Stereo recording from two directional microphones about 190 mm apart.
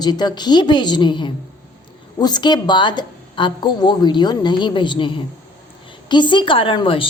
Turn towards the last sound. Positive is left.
turn(degrees=25)  # may be behind; listen again after turning